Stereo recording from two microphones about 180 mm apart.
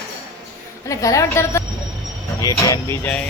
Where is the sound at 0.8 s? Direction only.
15° left (ahead or behind).